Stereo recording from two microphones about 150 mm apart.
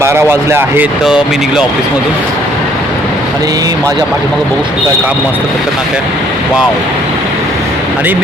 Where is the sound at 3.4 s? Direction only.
25° right (ahead or behind).